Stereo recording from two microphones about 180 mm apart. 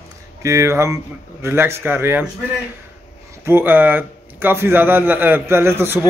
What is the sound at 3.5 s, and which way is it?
Speech, 10° right (ahead or behind).